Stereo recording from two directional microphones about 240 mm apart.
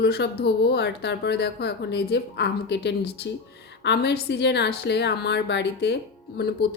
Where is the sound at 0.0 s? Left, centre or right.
Left.